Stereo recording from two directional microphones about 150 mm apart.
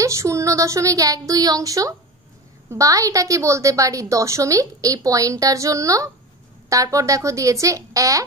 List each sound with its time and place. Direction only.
0.0 s a woman's voice: 20° right (ahead or behind)